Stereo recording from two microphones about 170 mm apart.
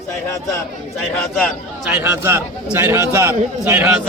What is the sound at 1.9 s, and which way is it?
A man's voice, 10° right (ahead or behind).